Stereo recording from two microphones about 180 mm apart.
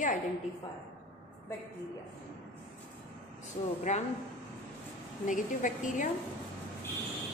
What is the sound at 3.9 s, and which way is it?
Speech, 40° left (ahead or behind).